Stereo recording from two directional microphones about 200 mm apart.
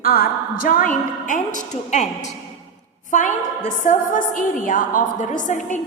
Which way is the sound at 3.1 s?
40° left (ahead or behind).